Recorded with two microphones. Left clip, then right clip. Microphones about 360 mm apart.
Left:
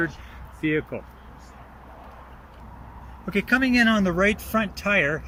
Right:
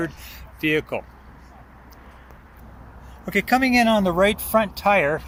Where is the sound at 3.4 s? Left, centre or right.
Right.